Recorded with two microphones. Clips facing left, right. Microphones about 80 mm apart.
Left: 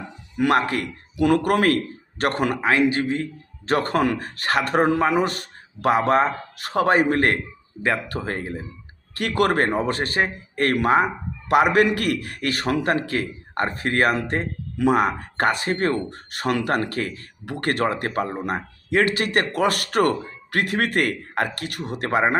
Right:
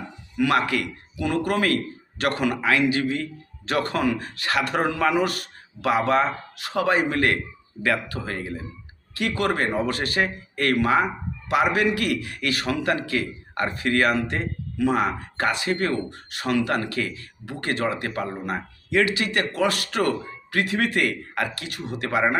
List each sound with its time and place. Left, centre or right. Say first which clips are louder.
0.3 s a man's voice: left 2 dB; left
1.1 s speech: left 5 dB; left
1.6 s a man's voice: left 3 dB; left
9.1 s a man's voice: left 4 dB; left
17.4 s speech: left 3 dB; left